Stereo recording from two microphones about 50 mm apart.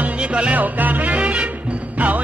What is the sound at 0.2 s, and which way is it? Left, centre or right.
Music, right.